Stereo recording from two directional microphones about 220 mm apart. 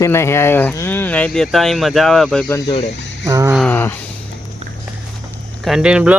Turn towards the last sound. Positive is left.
turn(degrees=-5)  # may be behind; listen again after turning